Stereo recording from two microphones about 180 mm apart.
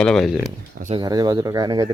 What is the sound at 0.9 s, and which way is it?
Speech, 20° right (ahead or behind).